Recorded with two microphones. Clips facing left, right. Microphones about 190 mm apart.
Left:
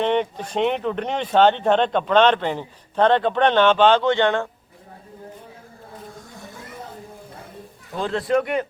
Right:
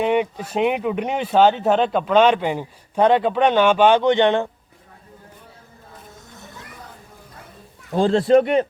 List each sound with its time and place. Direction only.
0.0 s speech: 10° right (ahead or behind)
7.9 s speech: 30° right (ahead or behind)